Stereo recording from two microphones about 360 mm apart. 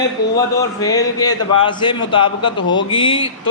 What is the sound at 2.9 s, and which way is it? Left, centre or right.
Speech, centre.